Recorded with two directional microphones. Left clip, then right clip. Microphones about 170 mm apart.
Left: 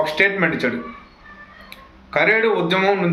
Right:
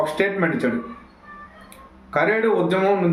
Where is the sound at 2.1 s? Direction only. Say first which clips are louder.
Left 3 dB; 15° right (ahead or behind).